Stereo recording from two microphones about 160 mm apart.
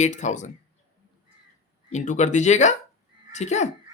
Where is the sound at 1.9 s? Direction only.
50° left (ahead or behind).